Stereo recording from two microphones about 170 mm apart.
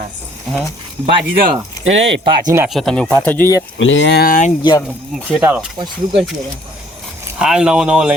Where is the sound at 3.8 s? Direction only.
90° left; by 4.5 s 50° left (ahead or behind).